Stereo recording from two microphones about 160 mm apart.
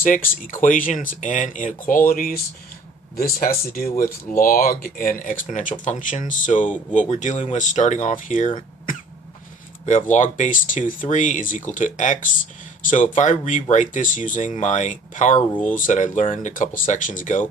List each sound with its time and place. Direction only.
0.0 s speech: 60° left (ahead or behind)
3.4 s speech: 65° left (ahead or behind)
9.8 s speech: 50° left (ahead or behind)